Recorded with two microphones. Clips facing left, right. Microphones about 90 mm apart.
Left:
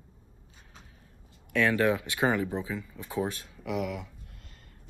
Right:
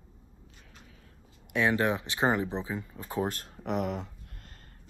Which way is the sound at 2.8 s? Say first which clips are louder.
Even; 40° right (ahead or behind).